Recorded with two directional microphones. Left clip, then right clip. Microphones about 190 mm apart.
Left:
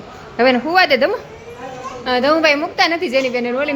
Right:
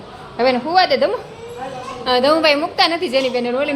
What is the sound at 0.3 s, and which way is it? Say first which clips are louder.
A woman's voice: left 2 dB; 20° left (ahead or behind).